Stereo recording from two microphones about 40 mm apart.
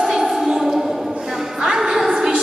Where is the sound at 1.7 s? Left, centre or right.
Centre.